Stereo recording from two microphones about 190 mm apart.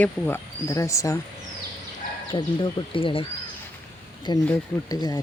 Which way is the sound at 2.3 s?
25° left (ahead or behind).